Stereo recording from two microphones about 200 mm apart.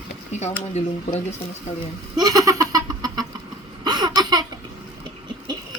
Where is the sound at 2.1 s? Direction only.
20° right (ahead or behind).